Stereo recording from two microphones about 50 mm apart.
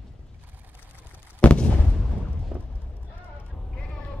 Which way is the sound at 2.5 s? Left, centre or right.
Right.